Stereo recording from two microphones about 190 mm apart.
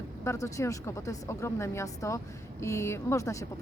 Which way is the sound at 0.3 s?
15° left (ahead or behind).